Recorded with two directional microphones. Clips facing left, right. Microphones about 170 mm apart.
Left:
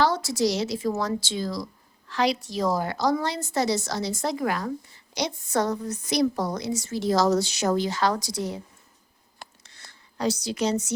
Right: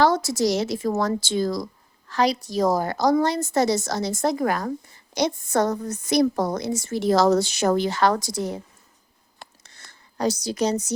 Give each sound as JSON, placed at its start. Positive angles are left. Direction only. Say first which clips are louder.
{"t": 0.0, "sound": "a woman's voice", "louder": "right 3 dB", "side_deg": -45}
{"t": 9.6, "sound": "a sound", "louder": "right 1 dB", "side_deg": -45}
{"t": 10.4, "sound": "a woman's voice", "louder": "right 2 dB", "side_deg": -40}